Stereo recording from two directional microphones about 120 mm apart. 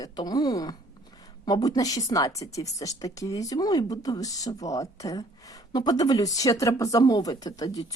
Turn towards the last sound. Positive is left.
turn(degrees=30)  # may be behind; listen again after turning